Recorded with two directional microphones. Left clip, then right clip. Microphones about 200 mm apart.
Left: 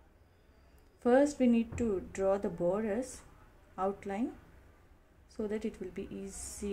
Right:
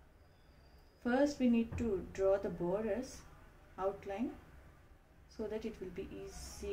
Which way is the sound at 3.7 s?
60° left (ahead or behind).